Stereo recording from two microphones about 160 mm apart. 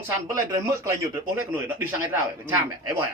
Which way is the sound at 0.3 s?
20° right (ahead or behind).